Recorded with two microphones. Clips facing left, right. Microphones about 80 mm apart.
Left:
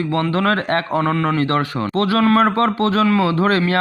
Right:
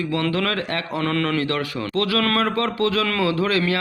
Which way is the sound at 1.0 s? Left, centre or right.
Left.